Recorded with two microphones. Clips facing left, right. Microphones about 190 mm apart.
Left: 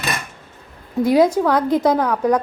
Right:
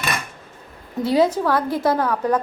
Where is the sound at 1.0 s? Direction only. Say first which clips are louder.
Left 3 dB; 10° left (ahead or behind).